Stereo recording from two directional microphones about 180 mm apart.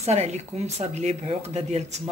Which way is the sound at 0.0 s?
35° right (ahead or behind).